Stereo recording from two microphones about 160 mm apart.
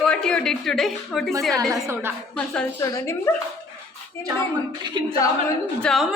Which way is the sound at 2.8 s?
15° left (ahead or behind).